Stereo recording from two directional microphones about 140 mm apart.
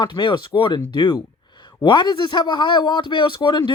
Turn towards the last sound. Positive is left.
turn(degrees=35)  # may be behind; listen again after turning